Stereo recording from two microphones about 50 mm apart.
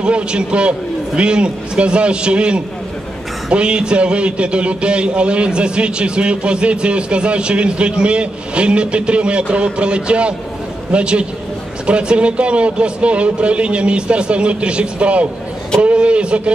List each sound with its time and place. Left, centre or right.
0.0 s a man's voice: centre